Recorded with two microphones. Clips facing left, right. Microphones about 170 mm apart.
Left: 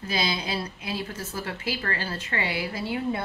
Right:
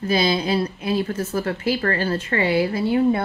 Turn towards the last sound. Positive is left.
turn(degrees=-55)  # may be behind; listen again after turning